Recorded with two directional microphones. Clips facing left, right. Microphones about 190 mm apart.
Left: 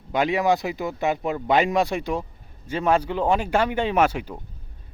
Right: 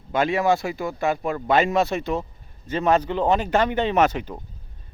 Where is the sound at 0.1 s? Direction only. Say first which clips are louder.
Even; 15° left (ahead or behind).